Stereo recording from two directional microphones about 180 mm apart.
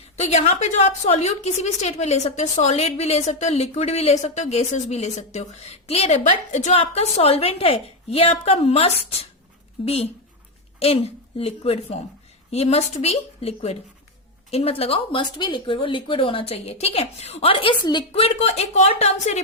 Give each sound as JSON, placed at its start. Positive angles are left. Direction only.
{"t": 0.2, "sound": "a woman's voice", "side_deg": 35}